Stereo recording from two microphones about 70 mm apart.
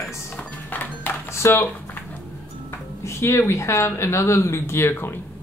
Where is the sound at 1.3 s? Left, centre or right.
Left.